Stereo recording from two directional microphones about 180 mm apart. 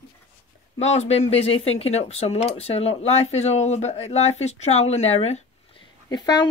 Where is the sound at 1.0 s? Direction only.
35° left (ahead or behind).